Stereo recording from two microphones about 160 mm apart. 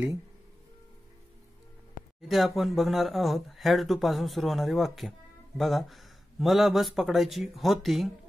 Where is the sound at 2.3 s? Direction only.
Centre (ahead or behind).